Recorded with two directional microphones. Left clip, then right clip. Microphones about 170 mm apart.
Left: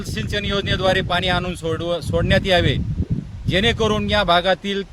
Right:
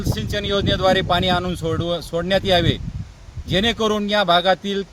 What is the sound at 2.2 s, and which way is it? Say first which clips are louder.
Speech: even; 40° left (ahead or behind).